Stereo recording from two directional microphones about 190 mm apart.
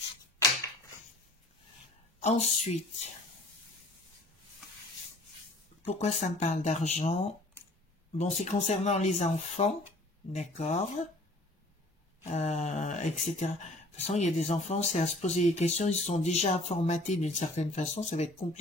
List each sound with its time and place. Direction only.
2.1 s speech: 35° left (ahead or behind)
5.9 s speech: 35° left (ahead or behind)
8.2 s speech: 35° left (ahead or behind)
12.3 s speech: 35° left (ahead or behind)